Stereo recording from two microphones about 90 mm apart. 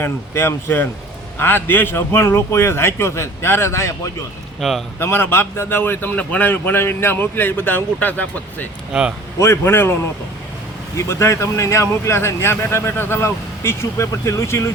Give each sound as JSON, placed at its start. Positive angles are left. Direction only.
{"t": 0.0, "sound": "speech", "side_deg": 25}
{"t": 4.6, "sound": "a man's voice", "side_deg": -5}
{"t": 4.9, "sound": "speech", "side_deg": 25}
{"t": 8.9, "sound": "speech", "side_deg": -10}
{"t": 9.4, "sound": "speech", "side_deg": 30}
{"t": 10.9, "sound": "speech", "side_deg": 30}